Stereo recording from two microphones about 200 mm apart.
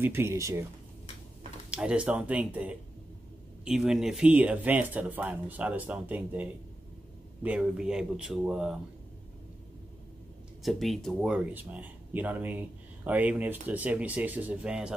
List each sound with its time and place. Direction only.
0.0 s speech: 10° right (ahead or behind)
1.7 s speech: 5° right (ahead or behind)
7.4 s speech: 5° right (ahead or behind)
10.6 s speech: centre (ahead or behind)